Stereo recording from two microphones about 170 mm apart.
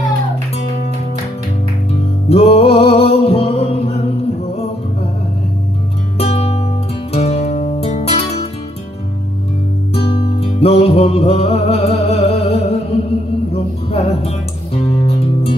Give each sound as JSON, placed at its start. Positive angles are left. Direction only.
{"t": 2.2, "sound": "music", "side_deg": 35}
{"t": 6.1, "sound": "music", "side_deg": 35}
{"t": 9.9, "sound": "music", "side_deg": 30}